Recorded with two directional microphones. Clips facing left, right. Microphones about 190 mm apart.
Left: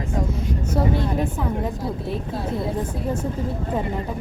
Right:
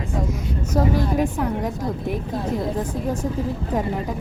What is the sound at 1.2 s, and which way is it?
Speech, 10° right (ahead or behind).